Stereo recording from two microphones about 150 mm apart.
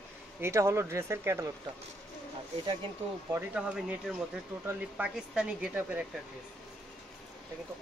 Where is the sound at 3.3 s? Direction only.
15° right (ahead or behind).